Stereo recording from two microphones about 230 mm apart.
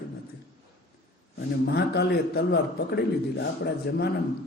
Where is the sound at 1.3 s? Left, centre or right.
Left.